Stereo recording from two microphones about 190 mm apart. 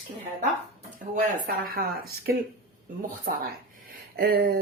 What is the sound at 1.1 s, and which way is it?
Speech, 50° right (ahead or behind).